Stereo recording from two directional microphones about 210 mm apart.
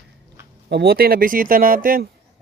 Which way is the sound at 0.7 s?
50° right (ahead or behind).